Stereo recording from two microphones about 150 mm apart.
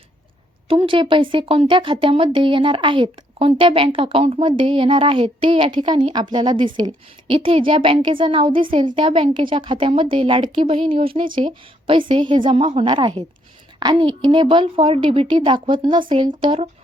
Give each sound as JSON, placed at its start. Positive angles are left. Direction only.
{"t": 0.7, "sound": "speech", "side_deg": -35}